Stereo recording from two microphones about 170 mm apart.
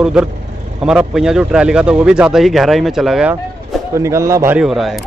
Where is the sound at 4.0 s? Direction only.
15° right (ahead or behind).